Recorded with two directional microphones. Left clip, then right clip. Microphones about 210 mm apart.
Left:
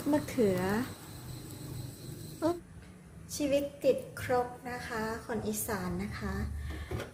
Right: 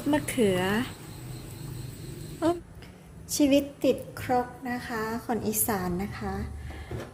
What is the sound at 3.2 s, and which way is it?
A woman's voice, 40° right (ahead or behind).